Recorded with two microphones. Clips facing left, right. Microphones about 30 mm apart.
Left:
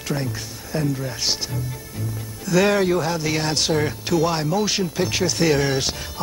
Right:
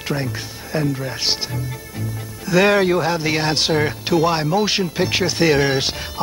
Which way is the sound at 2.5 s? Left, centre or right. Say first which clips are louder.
Right 3 dB; right.